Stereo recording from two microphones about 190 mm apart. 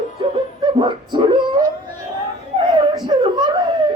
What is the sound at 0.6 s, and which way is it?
Speech, 25° right (ahead or behind).